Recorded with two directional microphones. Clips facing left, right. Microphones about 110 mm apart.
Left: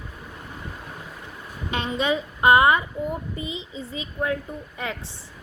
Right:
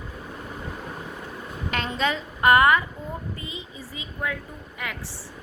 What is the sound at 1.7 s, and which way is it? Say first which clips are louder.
A woman's voice: left 2 dB; 20° left (ahead or behind).